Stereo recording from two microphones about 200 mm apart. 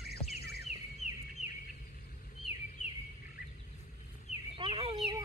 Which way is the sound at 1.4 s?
35° left (ahead or behind).